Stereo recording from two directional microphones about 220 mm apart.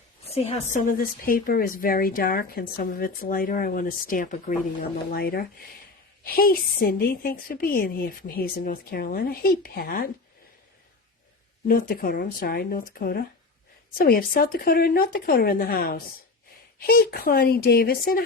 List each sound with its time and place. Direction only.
0.3 s a woman's voice: 25° left (ahead or behind)
0.7 s speech: 40° left (ahead or behind)
11.7 s speech: 40° left (ahead or behind)